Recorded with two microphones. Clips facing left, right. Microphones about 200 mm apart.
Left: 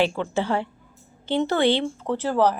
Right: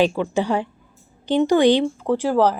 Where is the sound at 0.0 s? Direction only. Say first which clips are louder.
Right 4 dB; 15° right (ahead or behind).